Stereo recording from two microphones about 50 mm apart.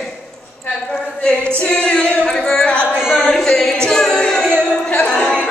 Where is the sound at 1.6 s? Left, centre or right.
Left.